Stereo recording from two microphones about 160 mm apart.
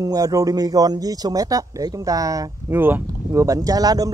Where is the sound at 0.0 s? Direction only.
20° right (ahead or behind).